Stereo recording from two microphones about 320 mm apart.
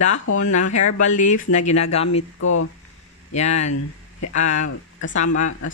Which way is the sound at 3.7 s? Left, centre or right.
Left.